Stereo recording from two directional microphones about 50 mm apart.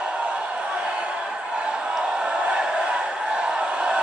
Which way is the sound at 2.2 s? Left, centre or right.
Centre.